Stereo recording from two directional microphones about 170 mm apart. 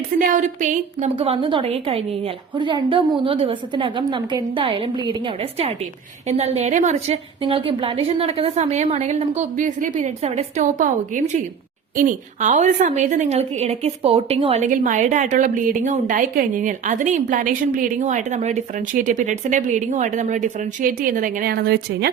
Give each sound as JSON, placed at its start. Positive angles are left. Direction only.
{"t": 0.2, "sound": "a woman's voice", "side_deg": -50}
{"t": 1.1, "sound": "a woman's voice", "side_deg": -35}